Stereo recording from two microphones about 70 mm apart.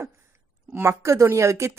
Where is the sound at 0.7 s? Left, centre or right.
Right.